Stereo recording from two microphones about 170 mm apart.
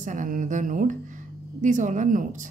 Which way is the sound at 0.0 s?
50° right (ahead or behind).